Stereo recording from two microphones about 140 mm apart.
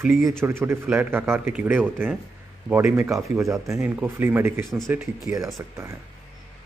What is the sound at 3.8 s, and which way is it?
Speech, 10° right (ahead or behind).